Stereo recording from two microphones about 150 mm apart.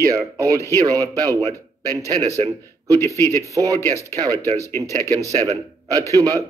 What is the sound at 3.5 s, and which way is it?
Speech, 20° right (ahead or behind).